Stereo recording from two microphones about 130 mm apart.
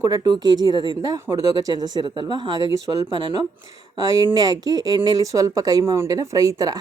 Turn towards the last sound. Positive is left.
turn(degrees=-30)  # may be behind; listen again after turning